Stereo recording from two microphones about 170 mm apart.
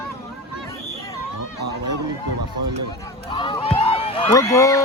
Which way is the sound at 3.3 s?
30° left (ahead or behind).